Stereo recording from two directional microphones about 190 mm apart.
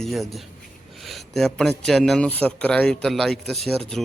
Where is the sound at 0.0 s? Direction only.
Centre (ahead or behind).